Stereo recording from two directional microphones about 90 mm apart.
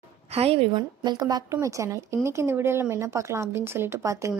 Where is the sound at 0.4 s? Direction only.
90° right.